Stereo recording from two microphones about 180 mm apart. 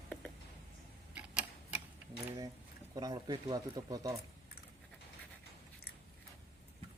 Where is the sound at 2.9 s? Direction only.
20° right (ahead or behind).